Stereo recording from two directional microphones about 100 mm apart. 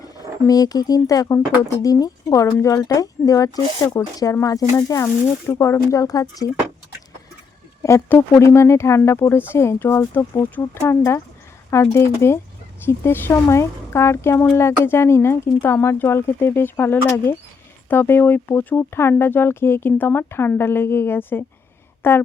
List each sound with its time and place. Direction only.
0.0 s speech: 40° left (ahead or behind)
7.8 s speech: 30° left (ahead or behind)